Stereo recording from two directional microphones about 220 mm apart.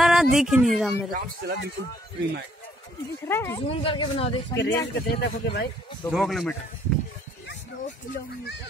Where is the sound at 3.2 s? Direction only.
10° left (ahead or behind).